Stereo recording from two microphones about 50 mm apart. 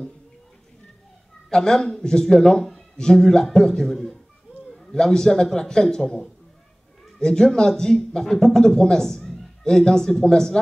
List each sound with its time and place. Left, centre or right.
1.5 s speech: centre